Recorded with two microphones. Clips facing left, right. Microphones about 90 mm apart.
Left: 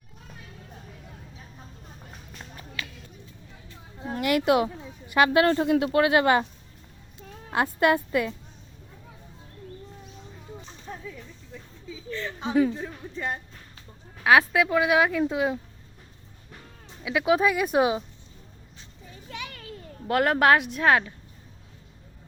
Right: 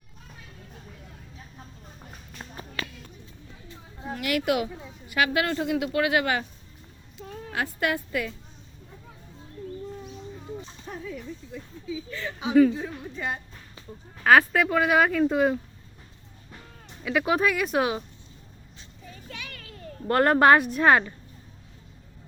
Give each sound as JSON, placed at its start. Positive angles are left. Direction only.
{"t": 2.8, "sound": "a sound", "side_deg": -40}
{"t": 4.1, "sound": "a woman's voice", "side_deg": 30}
{"t": 7.5, "sound": "a woman's voice", "side_deg": 30}
{"t": 11.5, "sound": "a woman's voice", "side_deg": -5}
{"t": 17.0, "sound": "speech", "side_deg": 5}
{"t": 17.5, "sound": "speech", "side_deg": 20}
{"t": 19.1, "sound": "a sound", "side_deg": 20}
{"t": 20.1, "sound": "a woman's voice", "side_deg": 0}